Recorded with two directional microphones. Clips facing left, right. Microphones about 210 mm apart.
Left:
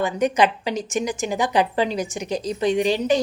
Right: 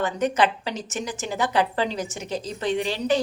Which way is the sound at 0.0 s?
15° left (ahead or behind).